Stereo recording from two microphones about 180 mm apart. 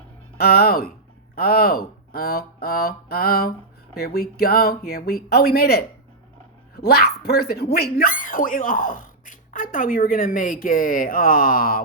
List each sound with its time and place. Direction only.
0.3 s mantra: 60° left (ahead or behind)
6.7 s speech: 60° left (ahead or behind)